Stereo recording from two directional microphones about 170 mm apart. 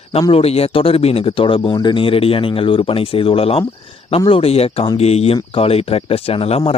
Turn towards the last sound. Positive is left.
turn(degrees=35)  # may be behind; listen again after turning